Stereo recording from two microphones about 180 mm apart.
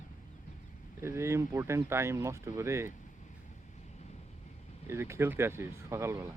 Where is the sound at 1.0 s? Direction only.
15° right (ahead or behind).